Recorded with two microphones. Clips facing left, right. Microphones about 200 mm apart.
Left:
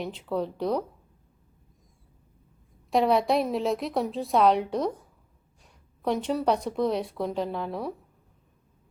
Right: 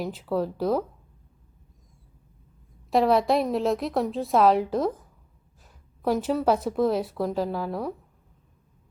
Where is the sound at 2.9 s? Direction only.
Centre (ahead or behind).